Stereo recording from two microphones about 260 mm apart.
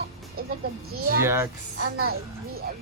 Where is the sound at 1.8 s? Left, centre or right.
Right.